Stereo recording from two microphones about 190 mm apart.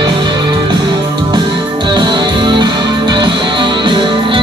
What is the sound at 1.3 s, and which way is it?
Music, 25° right (ahead or behind).